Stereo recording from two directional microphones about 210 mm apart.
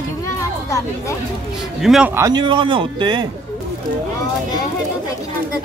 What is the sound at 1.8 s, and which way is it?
Speech, centre (ahead or behind).